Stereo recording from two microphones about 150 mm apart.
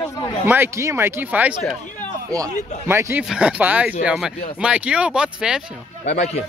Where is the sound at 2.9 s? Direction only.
15° right (ahead or behind).